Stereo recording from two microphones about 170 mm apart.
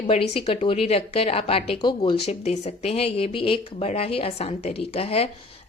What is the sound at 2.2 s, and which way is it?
Speech, 40° left (ahead or behind).